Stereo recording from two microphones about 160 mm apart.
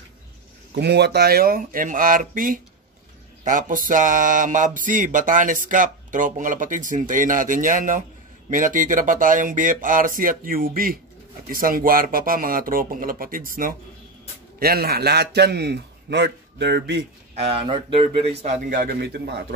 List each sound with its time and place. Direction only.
0.7 s mantra: 90° right; by 13.7 s 60° right (ahead or behind)
14.6 s a man's voice: 75° right (ahead or behind); by 17.0 s 90° right
17.4 s speech: 35° right (ahead or behind)
18.7 s a man's voice: 70° right (ahead or behind); by 19.4 s 85° right